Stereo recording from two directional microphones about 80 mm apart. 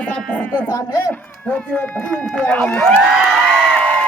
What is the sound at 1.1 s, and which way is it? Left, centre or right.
Speech, centre.